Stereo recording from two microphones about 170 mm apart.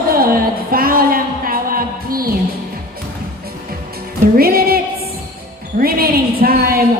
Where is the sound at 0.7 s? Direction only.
60° right (ahead or behind).